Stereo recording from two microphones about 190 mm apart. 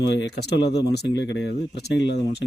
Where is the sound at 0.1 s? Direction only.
65° left (ahead or behind).